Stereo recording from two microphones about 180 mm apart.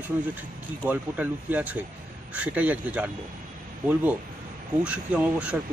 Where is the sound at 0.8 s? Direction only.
10° right (ahead or behind).